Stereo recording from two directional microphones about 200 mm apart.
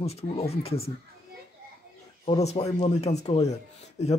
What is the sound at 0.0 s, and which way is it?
Speech, 30° left (ahead or behind).